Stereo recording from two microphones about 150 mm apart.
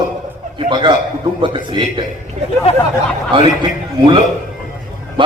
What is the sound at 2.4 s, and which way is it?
Speech, 50° right (ahead or behind).